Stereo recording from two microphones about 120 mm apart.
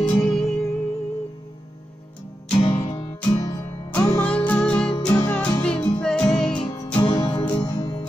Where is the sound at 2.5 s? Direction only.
50° left (ahead or behind).